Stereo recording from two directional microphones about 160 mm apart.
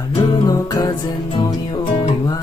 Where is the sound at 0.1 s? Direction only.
30° left (ahead or behind).